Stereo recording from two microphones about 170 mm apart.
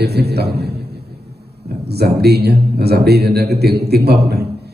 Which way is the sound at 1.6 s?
70° right (ahead or behind).